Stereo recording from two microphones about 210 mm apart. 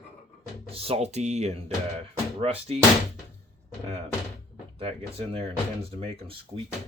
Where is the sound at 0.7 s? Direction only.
30° right (ahead or behind).